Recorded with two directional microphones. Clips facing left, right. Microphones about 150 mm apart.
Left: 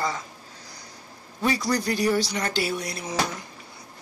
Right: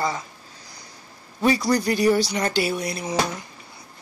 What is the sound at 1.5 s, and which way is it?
Speech, 25° right (ahead or behind).